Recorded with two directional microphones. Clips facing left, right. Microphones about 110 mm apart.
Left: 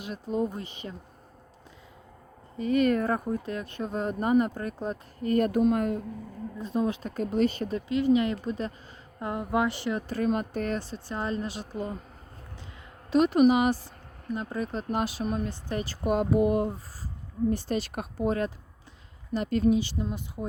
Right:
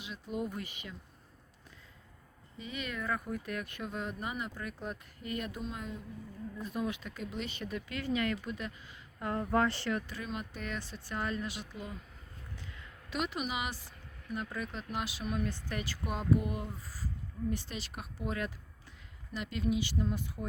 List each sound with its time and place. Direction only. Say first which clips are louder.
0.3 s speech: left 8 dB; 30° left (ahead or behind)
2.6 s speech: left 16 dB; 50° left (ahead or behind)
6.6 s speech: left 8 dB; 25° left (ahead or behind)
8.4 s speech: left 8 dB; 35° left (ahead or behind)
9.1 s speech: left 3 dB; 20° left (ahead or behind)
10.1 s speech: left 13 dB; 50° left (ahead or behind)
13.1 s speech: left 16 dB; 40° left (ahead or behind)
16.3 s speech: left 6 dB; 60° left (ahead or behind)
17.5 s speech: left 10 dB; 40° left (ahead or behind); by 20.5 s 20° left (ahead or behind)